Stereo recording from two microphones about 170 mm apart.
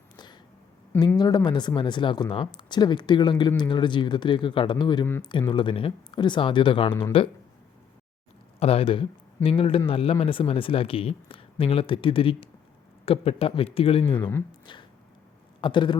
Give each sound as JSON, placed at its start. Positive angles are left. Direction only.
{"t": 0.9, "sound": "a man's voice", "side_deg": 25}
{"t": 8.5, "sound": "a man's voice", "side_deg": 35}
{"t": 14.0, "sound": "speech", "side_deg": 15}
{"t": 14.7, "sound": "a sound", "side_deg": 25}
{"t": 15.6, "sound": "speech", "side_deg": 30}